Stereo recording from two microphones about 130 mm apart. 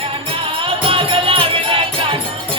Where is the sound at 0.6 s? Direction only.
40° right (ahead or behind).